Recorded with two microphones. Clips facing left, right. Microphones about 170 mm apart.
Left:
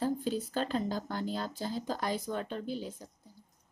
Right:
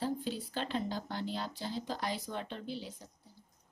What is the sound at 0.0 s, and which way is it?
Speech, 45° left (ahead or behind).